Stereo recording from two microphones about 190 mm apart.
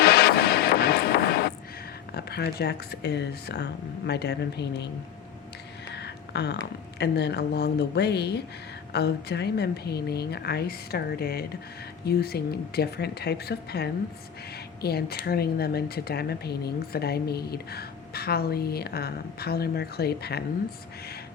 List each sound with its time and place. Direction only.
0.0 s music: 55° left (ahead or behind)
2.1 s a woman's voice: 55° left (ahead or behind)
5.9 s a woman's voice: 60° left (ahead or behind)